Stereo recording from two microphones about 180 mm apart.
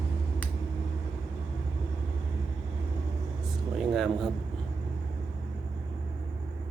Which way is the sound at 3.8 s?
Centre (ahead or behind).